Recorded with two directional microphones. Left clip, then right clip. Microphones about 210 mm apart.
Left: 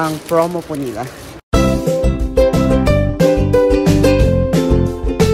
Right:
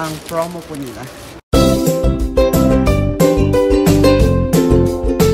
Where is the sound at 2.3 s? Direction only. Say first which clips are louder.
Even; centre (ahead or behind).